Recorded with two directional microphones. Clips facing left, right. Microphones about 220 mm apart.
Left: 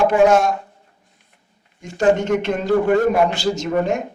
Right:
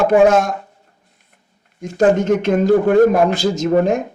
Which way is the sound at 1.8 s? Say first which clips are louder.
Right 3 dB; 50° right (ahead or behind).